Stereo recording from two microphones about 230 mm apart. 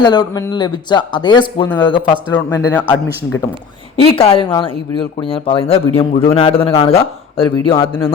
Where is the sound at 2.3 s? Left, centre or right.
Centre.